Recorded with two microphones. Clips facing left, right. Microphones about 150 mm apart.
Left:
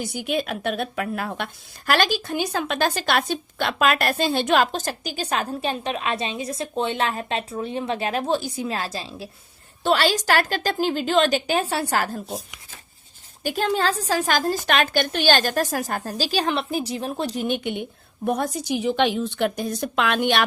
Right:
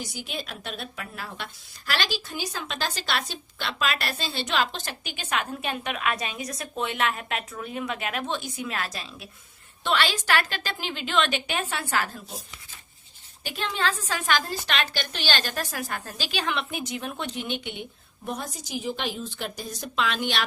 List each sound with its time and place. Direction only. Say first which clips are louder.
0.0 s a woman's voice: left 10 dB; 55° left (ahead or behind); by 12.2 s 40° left (ahead or behind)
13.4 s a woman's voice: left 6 dB; 45° left (ahead or behind)